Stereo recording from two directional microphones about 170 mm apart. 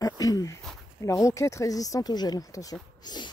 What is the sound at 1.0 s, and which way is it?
Speech, 20° left (ahead or behind).